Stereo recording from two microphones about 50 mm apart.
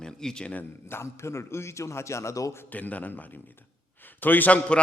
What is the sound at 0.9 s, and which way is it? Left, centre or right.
A man's voice, left.